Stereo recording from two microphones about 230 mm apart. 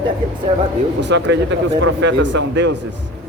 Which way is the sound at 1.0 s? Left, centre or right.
Right.